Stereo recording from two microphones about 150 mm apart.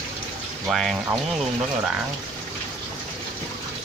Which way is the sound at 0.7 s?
Centre (ahead or behind).